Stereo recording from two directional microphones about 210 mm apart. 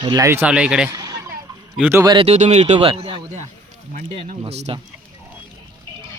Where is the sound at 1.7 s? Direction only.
10° right (ahead or behind); by 4.8 s 30° right (ahead or behind).